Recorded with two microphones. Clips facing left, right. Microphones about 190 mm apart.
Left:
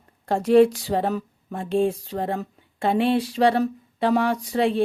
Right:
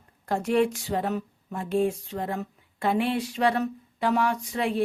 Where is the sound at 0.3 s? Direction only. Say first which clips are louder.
Left 7 dB; 30° left (ahead or behind).